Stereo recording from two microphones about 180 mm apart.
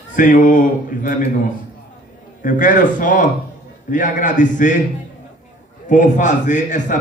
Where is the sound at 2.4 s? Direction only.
45° left (ahead or behind).